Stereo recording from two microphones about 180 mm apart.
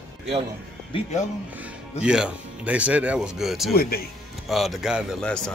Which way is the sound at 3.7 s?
60° left (ahead or behind).